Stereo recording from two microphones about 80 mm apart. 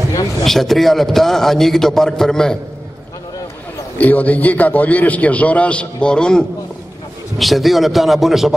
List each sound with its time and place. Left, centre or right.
0.4 s a man's voice: centre
4.0 s a man's voice: centre